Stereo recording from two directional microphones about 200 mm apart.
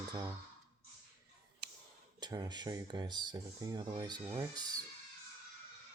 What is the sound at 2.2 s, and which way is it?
Speech, 20° right (ahead or behind).